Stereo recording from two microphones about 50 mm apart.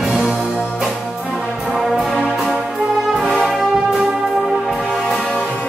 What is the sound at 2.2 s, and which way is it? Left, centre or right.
Music, centre.